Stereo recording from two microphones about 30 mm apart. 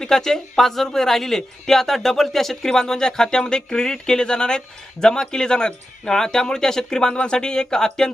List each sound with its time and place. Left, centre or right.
0.0 s speech: centre
2.6 s speech: centre
7.1 s speech: left; by 8.1 s centre